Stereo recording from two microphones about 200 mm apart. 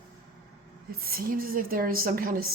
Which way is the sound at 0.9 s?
50° right (ahead or behind).